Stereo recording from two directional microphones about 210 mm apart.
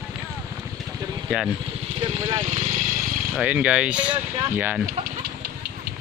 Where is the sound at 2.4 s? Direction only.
35° right (ahead or behind).